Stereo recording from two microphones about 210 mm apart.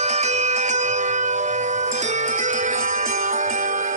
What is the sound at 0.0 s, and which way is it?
Music, 30° right (ahead or behind).